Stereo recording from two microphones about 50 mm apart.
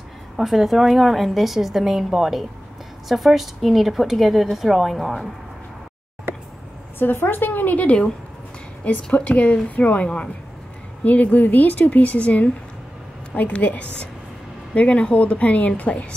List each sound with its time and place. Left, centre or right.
0.4 s a woman's voice: centre
7.0 s a woman's voice: left